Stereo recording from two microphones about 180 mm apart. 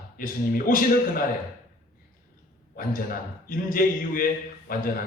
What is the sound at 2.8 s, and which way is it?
A man's voice, 50° left (ahead or behind).